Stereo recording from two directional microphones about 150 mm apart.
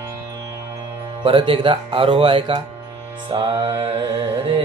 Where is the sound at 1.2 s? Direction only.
35° right (ahead or behind).